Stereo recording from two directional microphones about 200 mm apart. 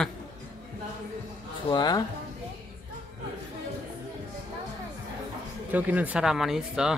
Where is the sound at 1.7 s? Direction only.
20° left (ahead or behind).